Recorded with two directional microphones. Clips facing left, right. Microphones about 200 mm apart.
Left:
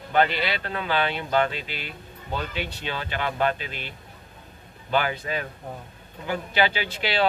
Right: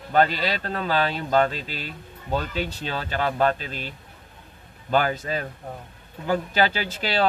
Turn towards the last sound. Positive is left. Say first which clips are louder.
# right 1 dB
turn(degrees=-40)  # may be behind; listen again after turning